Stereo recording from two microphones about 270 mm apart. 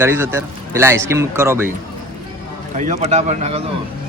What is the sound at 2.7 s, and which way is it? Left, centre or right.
Speech, right.